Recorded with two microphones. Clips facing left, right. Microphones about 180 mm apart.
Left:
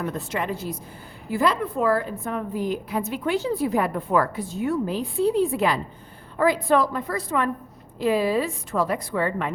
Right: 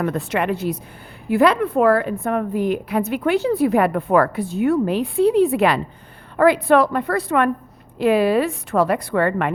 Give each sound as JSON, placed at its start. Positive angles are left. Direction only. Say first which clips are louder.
{"t": 0.0, "sound": "a woman's voice", "louder": "right 6 dB", "side_deg": -65}